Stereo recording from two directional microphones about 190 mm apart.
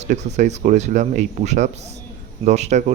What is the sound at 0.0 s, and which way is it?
Speech, 35° right (ahead or behind).